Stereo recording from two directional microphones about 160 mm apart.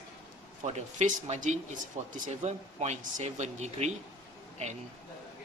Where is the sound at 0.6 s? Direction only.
45° right (ahead or behind).